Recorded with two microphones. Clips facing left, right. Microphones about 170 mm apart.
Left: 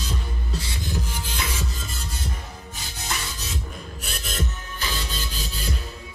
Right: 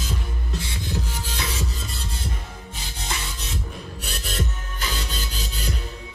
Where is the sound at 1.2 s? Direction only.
35° right (ahead or behind).